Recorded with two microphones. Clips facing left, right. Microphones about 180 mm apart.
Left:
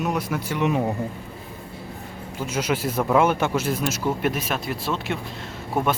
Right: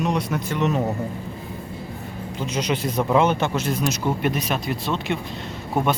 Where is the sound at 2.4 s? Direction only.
10° left (ahead or behind).